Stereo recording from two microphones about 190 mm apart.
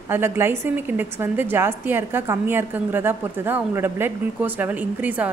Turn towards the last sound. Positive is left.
turn(degrees=-10)  # may be behind; listen again after turning